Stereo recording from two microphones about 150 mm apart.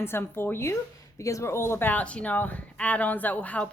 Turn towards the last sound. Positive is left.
turn(degrees=10)  # may be behind; listen again after turning